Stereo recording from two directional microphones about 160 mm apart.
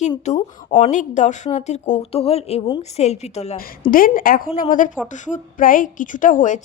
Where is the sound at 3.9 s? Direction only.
60° left (ahead or behind).